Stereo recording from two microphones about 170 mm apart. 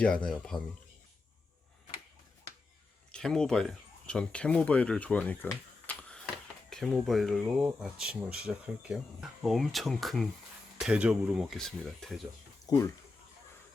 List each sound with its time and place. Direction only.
0.0 s speech: 5° left (ahead or behind)
3.1 s speech: 5° left (ahead or behind)
12.6 s speech: 20° left (ahead or behind)